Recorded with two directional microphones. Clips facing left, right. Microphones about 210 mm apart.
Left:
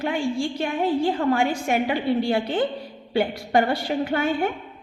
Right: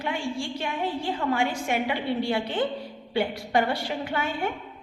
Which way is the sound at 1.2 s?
45° left (ahead or behind).